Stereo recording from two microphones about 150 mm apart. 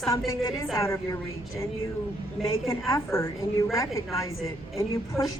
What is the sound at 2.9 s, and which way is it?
A woman's voice, 20° left (ahead or behind).